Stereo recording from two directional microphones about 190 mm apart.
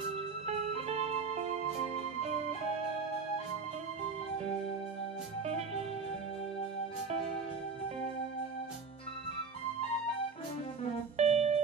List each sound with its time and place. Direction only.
0.5 s music: 35° right (ahead or behind)
5.4 s music: 35° right (ahead or behind)
11.1 s music: 35° right (ahead or behind)